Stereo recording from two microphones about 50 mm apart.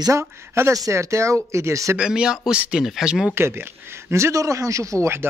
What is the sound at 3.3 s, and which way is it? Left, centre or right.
Speech, right.